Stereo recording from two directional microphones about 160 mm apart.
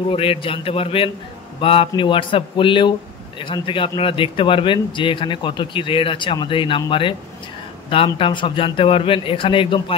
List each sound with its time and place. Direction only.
0.1 s speech: 35° left (ahead or behind)